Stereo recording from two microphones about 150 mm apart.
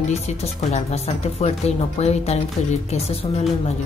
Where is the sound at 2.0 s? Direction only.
45° left (ahead or behind).